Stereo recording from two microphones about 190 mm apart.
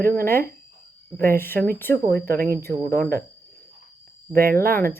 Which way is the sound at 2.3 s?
55° right (ahead or behind).